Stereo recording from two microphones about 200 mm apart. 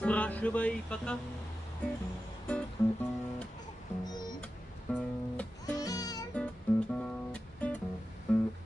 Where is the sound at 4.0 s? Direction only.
20° left (ahead or behind).